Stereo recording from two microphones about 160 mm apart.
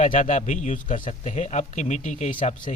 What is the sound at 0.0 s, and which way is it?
Speech, 50° left (ahead or behind).